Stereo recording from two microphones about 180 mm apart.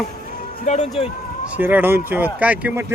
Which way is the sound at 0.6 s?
40° left (ahead or behind).